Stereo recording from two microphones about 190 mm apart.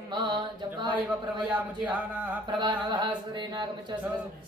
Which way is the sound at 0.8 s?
25° right (ahead or behind).